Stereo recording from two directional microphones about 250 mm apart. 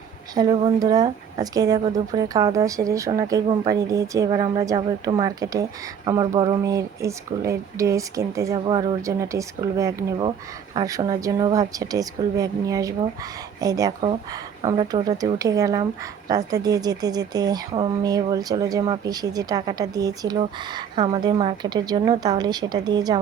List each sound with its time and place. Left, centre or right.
0.3 s speech: centre